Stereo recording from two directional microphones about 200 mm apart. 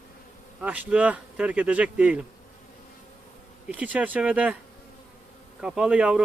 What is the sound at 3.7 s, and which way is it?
Speech, 5° right (ahead or behind).